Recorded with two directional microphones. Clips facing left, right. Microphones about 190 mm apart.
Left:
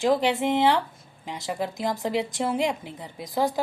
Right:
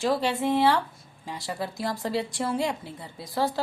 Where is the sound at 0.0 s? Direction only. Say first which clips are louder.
Left 3 dB; 20° left (ahead or behind).